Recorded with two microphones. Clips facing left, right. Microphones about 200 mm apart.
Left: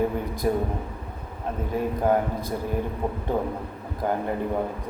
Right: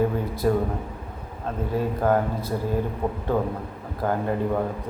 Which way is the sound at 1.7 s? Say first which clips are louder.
Right 1 dB; 15° left (ahead or behind).